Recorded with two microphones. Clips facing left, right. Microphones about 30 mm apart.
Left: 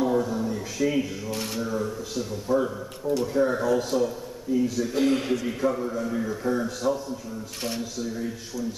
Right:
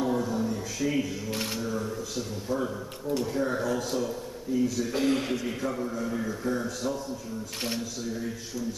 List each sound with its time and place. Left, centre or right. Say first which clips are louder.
0.0 s a sound: left 3 dB; centre
1.3 s mantra: left 1 dB; centre
1.6 s a man's voice: left 3 dB; centre
8.0 s speech: left 3 dB; centre